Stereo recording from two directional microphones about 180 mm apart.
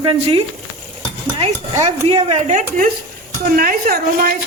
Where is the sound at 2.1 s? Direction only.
35° right (ahead or behind).